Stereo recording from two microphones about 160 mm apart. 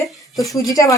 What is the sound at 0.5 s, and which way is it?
Speech, 20° left (ahead or behind).